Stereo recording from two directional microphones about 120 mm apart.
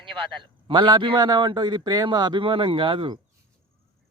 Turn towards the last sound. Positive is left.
turn(degrees=-45)  # may be behind; listen again after turning